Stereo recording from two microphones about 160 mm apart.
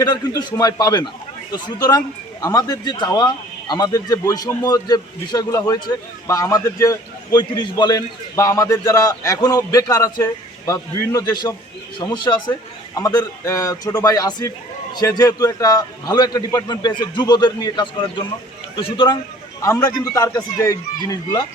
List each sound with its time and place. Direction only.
0.0 s a man's voice: 25° left (ahead or behind)
19.6 s a man's voice: 20° left (ahead or behind)